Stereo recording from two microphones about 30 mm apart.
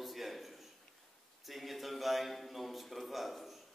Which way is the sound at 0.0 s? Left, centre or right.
Centre.